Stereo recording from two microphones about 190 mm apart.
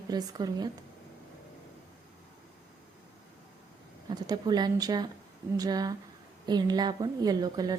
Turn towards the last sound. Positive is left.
turn(degrees=-20)  # may be behind; listen again after turning